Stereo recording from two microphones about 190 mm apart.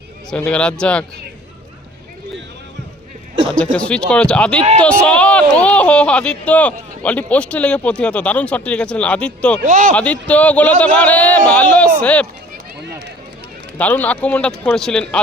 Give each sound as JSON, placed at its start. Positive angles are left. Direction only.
{"t": 0.3, "sound": "a man's voice", "side_deg": 5}
{"t": 3.4, "sound": "a man's voice", "side_deg": 5}
{"t": 9.6, "sound": "speech", "side_deg": -45}
{"t": 9.9, "sound": "speech", "side_deg": 5}
{"t": 13.7, "sound": "a man's voice", "side_deg": 10}